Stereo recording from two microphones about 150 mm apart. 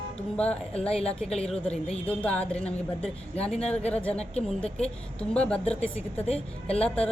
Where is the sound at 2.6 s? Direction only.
45° left (ahead or behind).